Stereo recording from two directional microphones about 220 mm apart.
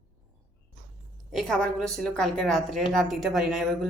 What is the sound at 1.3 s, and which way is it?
A woman's voice, 5° left (ahead or behind).